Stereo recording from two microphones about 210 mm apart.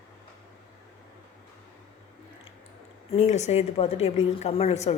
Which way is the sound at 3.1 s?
30° left (ahead or behind).